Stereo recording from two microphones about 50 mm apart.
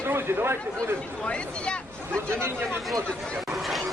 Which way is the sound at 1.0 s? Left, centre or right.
Left.